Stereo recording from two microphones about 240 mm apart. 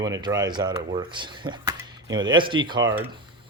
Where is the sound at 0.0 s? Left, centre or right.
Centre.